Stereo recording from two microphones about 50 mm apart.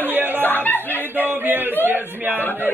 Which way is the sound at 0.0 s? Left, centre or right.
Right.